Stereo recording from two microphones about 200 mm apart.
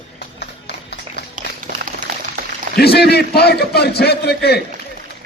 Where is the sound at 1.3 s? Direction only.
40° right (ahead or behind).